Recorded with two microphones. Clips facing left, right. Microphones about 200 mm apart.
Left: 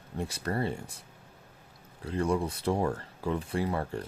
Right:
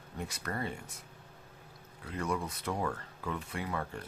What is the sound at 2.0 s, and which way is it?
Speech, 30° left (ahead or behind).